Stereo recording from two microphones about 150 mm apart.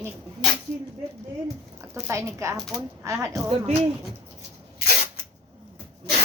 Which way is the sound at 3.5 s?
45° right (ahead or behind).